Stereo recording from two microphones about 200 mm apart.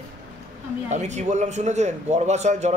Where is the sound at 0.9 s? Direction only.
35° right (ahead or behind).